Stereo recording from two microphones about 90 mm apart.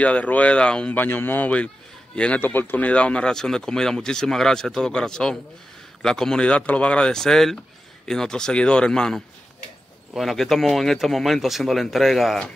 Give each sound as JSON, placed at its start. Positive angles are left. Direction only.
{"t": 0.0, "sound": "speech", "side_deg": 15}
{"t": 2.4, "sound": "speech", "side_deg": 20}